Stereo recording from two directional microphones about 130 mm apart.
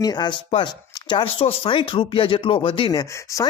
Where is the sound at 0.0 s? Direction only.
35° left (ahead or behind).